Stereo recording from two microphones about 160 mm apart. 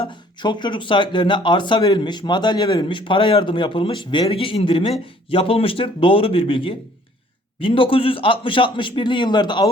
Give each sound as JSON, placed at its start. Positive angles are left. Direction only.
{"t": 0.0, "sound": "speech", "side_deg": 30}